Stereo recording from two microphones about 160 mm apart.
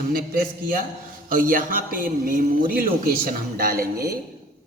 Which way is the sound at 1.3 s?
60° right (ahead or behind).